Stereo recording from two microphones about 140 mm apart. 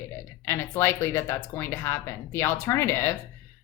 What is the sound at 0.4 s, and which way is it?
Speech, 20° left (ahead or behind).